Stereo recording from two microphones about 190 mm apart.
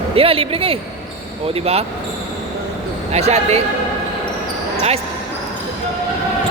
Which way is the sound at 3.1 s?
35° right (ahead or behind).